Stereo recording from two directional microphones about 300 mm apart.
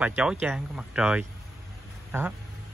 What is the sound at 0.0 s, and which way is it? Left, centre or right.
Speech, centre.